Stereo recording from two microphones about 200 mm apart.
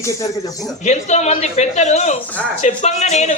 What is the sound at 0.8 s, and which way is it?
A man's voice, 35° left (ahead or behind).